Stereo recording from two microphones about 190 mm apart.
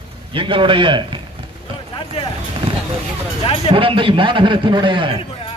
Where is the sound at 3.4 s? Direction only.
30° left (ahead or behind).